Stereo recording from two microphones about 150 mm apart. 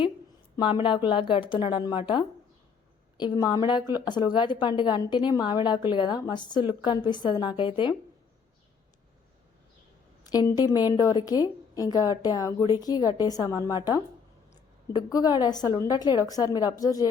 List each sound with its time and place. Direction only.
0.5 s a woman's voice: 35° left (ahead or behind)
10.2 s a woman's voice: 25° left (ahead or behind)